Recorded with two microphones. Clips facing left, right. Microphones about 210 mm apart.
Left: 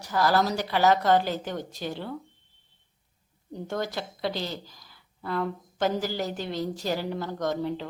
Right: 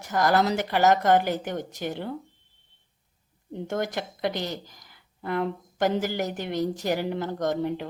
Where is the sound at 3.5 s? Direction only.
20° right (ahead or behind).